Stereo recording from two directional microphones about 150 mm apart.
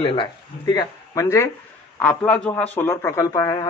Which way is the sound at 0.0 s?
35° left (ahead or behind).